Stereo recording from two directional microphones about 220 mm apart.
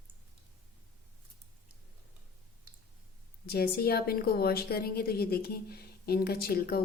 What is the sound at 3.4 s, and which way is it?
A woman's voice, 45° left (ahead or behind).